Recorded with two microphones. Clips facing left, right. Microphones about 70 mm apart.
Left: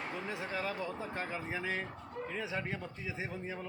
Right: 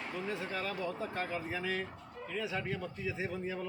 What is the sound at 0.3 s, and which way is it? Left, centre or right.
Speech, centre.